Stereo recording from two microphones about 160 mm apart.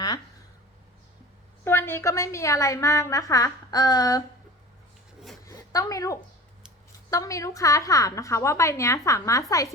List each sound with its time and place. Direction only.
1.6 s a woman's voice: 15° left (ahead or behind)
5.5 s zipper: 20° left (ahead or behind)
7.1 s a woman's voice: 20° left (ahead or behind)